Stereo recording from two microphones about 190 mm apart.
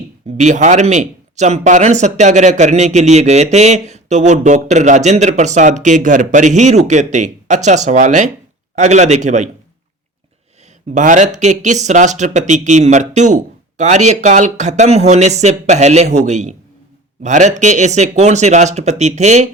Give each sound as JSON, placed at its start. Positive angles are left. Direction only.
{"t": 0.3, "sound": "speech", "side_deg": -40}
{"t": 10.9, "sound": "speech", "side_deg": -40}